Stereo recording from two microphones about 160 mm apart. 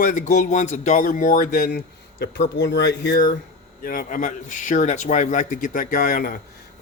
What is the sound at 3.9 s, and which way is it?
A man's voice, 55° left (ahead or behind).